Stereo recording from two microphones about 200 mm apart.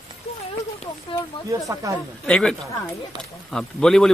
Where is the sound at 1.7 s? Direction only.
15° right (ahead or behind).